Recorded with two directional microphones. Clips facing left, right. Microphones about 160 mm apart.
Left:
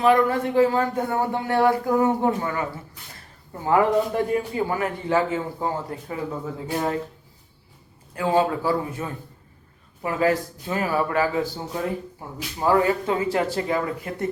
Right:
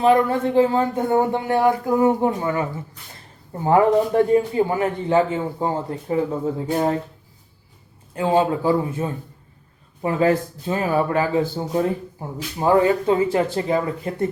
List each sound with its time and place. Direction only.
0.0 s a man's voice: 30° right (ahead or behind)
8.1 s a man's voice: 20° right (ahead or behind)